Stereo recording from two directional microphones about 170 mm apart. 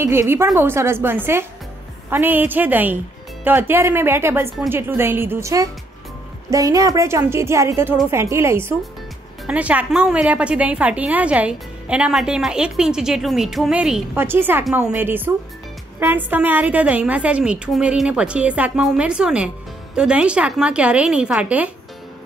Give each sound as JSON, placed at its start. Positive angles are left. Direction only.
{"t": 0.0, "sound": "a woman's voice", "side_deg": -15}